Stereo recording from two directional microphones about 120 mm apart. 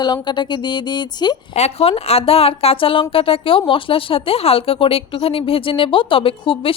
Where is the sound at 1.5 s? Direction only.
55° left (ahead or behind).